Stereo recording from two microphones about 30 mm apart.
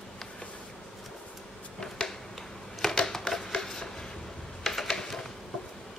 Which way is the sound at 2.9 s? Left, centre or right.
Centre.